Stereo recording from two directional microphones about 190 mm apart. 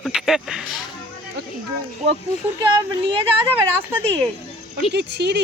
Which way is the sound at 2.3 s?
35° left (ahead or behind).